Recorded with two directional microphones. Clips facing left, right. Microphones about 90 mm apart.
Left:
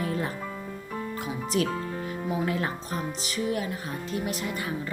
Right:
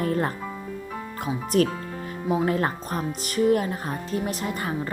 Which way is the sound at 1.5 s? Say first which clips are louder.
Right 6 dB; 50° right (ahead or behind).